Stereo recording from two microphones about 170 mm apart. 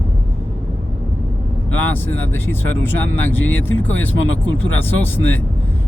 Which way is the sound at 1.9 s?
10° left (ahead or behind).